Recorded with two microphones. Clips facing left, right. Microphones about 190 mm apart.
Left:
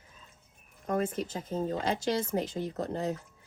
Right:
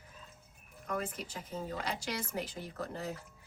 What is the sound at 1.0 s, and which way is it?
Speech, 25° left (ahead or behind).